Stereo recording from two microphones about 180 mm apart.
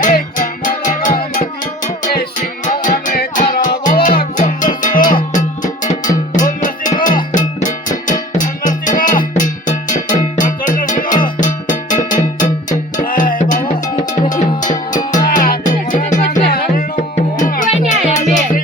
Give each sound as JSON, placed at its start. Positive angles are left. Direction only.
{"t": 0.0, "sound": "music", "side_deg": 45}
{"t": 2.8, "sound": "music", "side_deg": 50}